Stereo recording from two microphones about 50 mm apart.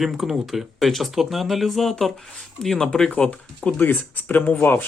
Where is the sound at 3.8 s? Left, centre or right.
Left.